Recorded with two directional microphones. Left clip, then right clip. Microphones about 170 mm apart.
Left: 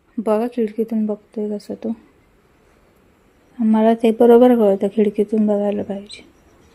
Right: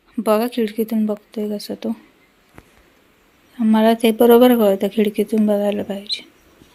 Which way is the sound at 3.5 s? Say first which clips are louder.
Even; 15° left (ahead or behind).